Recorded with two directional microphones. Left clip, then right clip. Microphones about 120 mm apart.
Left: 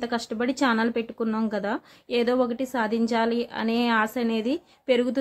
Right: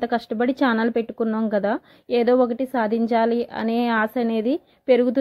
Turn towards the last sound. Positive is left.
turn(degrees=-40)  # may be behind; listen again after turning